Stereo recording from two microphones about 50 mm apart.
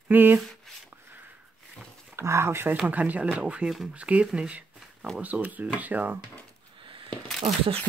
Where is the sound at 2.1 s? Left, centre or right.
Right.